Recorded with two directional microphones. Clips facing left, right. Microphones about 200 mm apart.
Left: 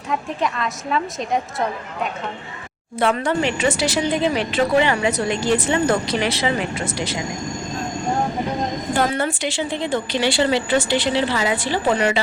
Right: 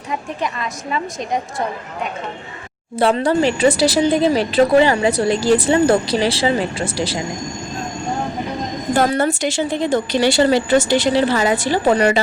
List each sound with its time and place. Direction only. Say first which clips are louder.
0.1 s a woman's voice: left 1 dB; centre (ahead or behind)
3.0 s a woman's voice: right 4 dB; 35° right (ahead or behind)
9.0 s a woman's voice: right 5 dB; 40° right (ahead or behind)